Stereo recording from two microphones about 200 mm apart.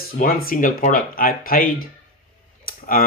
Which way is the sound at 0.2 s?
45° left (ahead or behind).